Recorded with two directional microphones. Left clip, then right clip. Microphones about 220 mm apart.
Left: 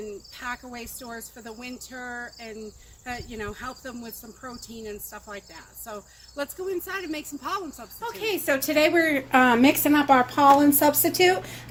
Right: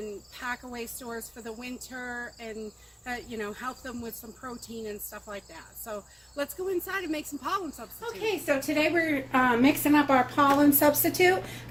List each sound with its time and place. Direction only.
0.0 s speech: 5° right (ahead or behind)
8.0 s a woman's voice: 35° left (ahead or behind)
10.3 s speech: centre (ahead or behind)